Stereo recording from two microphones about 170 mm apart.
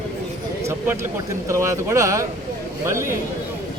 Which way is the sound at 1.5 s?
15° right (ahead or behind).